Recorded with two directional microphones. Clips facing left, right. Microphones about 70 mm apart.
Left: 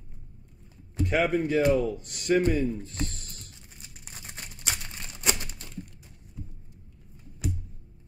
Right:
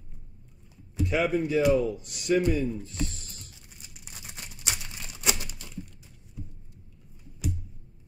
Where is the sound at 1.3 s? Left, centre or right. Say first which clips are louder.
Left 1 dB; left.